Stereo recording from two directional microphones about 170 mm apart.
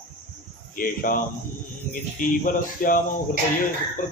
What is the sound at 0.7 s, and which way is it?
Speech, 55° left (ahead or behind).